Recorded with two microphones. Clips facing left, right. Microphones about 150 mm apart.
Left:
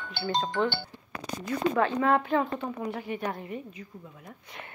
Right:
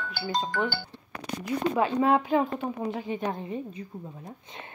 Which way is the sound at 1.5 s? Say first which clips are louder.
Even; 15° right (ahead or behind).